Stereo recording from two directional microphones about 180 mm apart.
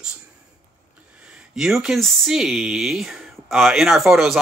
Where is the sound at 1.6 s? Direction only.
Centre (ahead or behind).